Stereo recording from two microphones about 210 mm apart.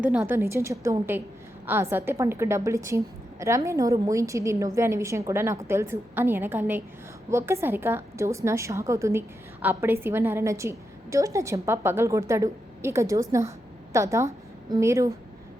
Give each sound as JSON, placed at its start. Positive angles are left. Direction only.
{"t": 0.0, "sound": "a woman's voice", "side_deg": -5}